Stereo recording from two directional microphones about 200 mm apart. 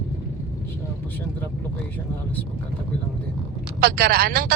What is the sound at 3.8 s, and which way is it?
Speech, 50° right (ahead or behind).